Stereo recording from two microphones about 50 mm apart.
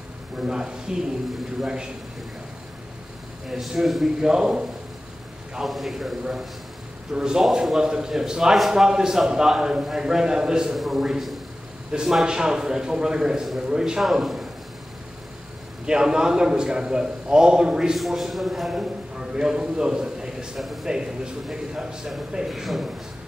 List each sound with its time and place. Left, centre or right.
0.5 s a man's voice: centre
3.4 s a man's voice: centre
5.7 s a man's voice: centre
14.0 s speech: centre
15.8 s a man's voice: centre
17.9 s speech: centre
18.8 s a man's voice: centre
20.5 s speech: centre
20.8 s a man's voice: centre
22.5 s speech: centre